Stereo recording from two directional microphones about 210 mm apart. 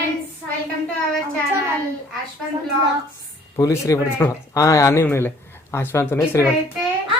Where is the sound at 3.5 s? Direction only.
15° left (ahead or behind).